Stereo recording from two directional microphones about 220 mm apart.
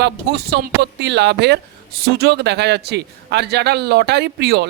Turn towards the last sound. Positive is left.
turn(degrees=-50)  # may be behind; listen again after turning